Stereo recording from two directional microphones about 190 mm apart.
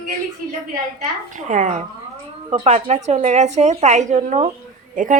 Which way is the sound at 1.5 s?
40° right (ahead or behind).